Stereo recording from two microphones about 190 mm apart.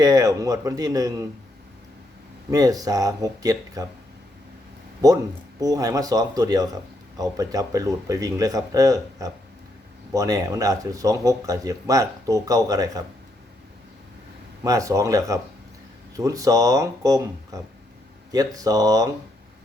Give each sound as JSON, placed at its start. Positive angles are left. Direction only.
{"t": 0.0, "sound": "speech", "side_deg": -20}
{"t": 2.5, "sound": "speech", "side_deg": -20}
{"t": 5.5, "sound": "speech", "side_deg": -20}
{"t": 14.6, "sound": "speech", "side_deg": -15}